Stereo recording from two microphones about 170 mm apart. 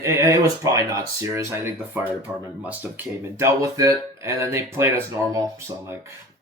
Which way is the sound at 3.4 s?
20° right (ahead or behind).